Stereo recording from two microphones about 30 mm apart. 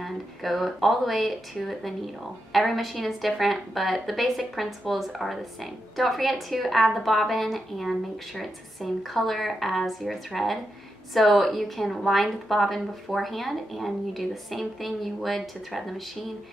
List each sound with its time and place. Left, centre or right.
0.0 s a woman's voice: centre